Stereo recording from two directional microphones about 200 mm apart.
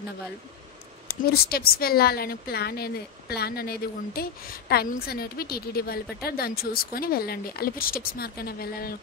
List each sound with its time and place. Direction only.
1.0 s a woman's voice: 50° left (ahead or behind)